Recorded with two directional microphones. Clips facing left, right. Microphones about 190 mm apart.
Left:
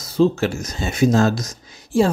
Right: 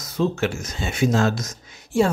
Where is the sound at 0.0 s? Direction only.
30° left (ahead or behind).